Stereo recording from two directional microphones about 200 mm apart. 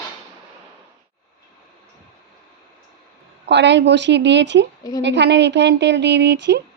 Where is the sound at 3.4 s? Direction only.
60° right (ahead or behind).